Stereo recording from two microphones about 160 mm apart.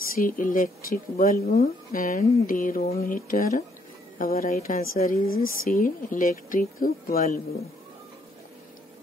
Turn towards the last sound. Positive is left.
turn(degrees=60)  # may be behind; listen again after turning